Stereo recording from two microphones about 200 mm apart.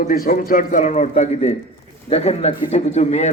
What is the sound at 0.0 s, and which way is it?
A man's voice, 45° left (ahead or behind).